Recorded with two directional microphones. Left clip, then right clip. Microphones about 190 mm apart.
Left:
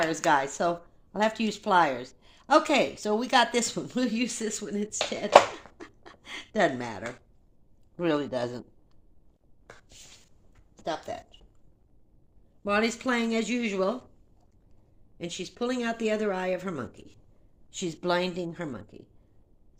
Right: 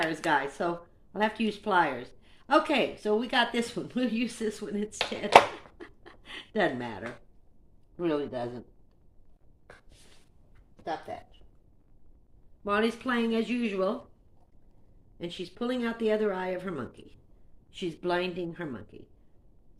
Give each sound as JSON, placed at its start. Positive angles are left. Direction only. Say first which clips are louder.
{"t": 0.3, "sound": "speech", "louder": "left 4 dB", "side_deg": 35}
{"t": 5.7, "sound": "a sound", "louder": "left 1 dB", "side_deg": 35}
{"t": 7.9, "sound": "speech", "louder": "left 3 dB", "side_deg": 45}
{"t": 10.8, "sound": "speech", "louder": "left 2 dB", "side_deg": 50}
{"t": 12.6, "sound": "speech", "louder": "left 2 dB", "side_deg": 40}
{"t": 15.2, "sound": "speech", "louder": "left 3 dB", "side_deg": 30}